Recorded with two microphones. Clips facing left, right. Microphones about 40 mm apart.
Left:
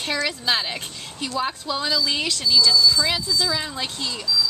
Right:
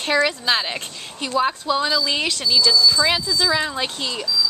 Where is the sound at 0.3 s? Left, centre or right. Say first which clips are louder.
Right 2 dB; centre.